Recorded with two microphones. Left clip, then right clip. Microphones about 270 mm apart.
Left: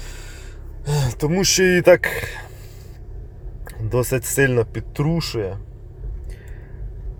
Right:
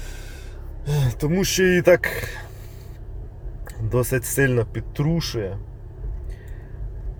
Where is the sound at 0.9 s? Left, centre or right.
Left.